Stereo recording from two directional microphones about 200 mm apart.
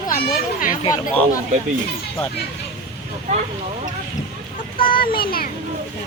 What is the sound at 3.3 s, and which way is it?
Speech, 35° right (ahead or behind).